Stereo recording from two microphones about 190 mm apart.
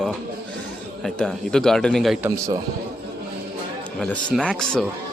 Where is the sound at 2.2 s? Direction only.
15° right (ahead or behind).